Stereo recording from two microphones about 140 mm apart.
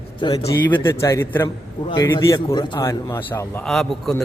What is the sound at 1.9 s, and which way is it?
A man's voice, 30° left (ahead or behind).